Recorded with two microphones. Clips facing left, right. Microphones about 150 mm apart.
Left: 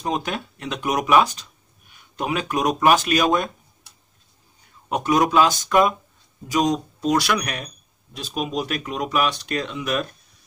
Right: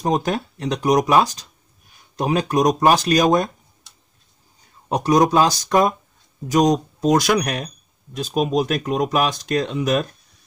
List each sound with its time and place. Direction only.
0.0 s speech: 40° right (ahead or behind)
4.8 s speech: 35° right (ahead or behind)
7.0 s speech: 45° right (ahead or behind)